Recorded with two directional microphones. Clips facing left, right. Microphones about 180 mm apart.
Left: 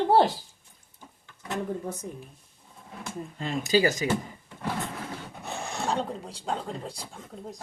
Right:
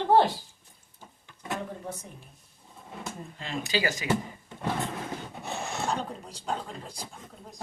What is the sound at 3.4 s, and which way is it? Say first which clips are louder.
Speech: left 7 dB; 40° left (ahead or behind).